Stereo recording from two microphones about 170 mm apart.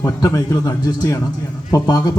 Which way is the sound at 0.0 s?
20° left (ahead or behind).